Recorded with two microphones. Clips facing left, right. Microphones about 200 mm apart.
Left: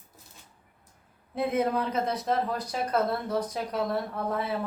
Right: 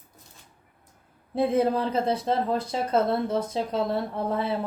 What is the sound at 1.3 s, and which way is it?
Speech, 30° right (ahead or behind).